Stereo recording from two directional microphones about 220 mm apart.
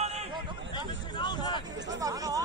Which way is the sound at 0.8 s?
20° left (ahead or behind).